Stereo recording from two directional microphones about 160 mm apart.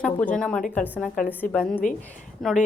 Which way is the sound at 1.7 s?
60° left (ahead or behind).